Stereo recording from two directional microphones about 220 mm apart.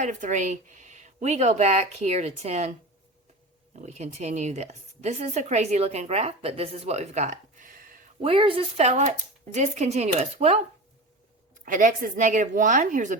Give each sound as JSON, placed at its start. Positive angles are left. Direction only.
{"t": 0.0, "sound": "a woman's voice", "side_deg": -35}
{"t": 3.8, "sound": "a woman's voice", "side_deg": -30}
{"t": 8.2, "sound": "speech", "side_deg": -25}
{"t": 11.6, "sound": "a woman's voice", "side_deg": -40}